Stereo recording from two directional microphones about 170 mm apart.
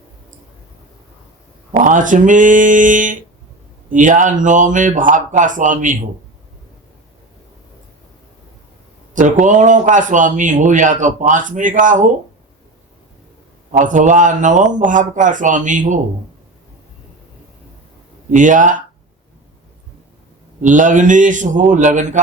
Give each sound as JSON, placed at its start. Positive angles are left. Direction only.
{"t": 1.8, "sound": "a man's voice", "side_deg": -50}
{"t": 9.1, "sound": "a man's voice", "side_deg": -45}
{"t": 13.7, "sound": "a man's voice", "side_deg": -50}
{"t": 18.3, "sound": "a man's voice", "side_deg": -50}
{"t": 20.6, "sound": "a man's voice", "side_deg": -50}